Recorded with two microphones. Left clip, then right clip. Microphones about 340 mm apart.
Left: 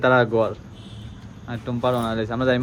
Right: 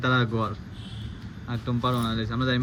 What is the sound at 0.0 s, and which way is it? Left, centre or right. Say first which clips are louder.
Speech: left 8 dB; centre.